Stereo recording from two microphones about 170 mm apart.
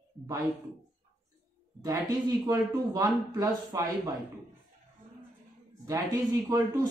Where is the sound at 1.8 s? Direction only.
20° right (ahead or behind).